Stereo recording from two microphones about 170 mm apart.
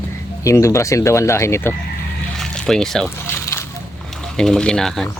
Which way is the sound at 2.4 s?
5° left (ahead or behind).